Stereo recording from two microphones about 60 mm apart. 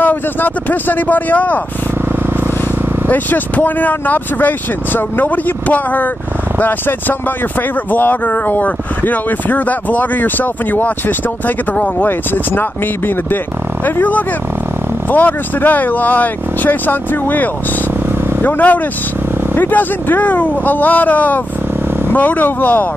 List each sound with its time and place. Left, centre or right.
0.0 s speech: left
3.1 s speech: left
11.7 s speech: left
12.1 s speech: left